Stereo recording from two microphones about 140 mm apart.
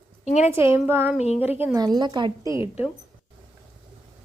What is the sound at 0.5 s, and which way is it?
Speech, 20° right (ahead or behind).